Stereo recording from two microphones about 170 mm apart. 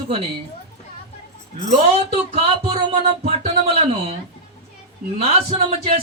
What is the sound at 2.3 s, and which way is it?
Speech, 40° right (ahead or behind).